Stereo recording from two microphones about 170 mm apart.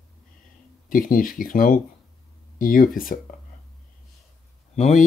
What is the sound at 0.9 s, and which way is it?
Speech, 55° left (ahead or behind).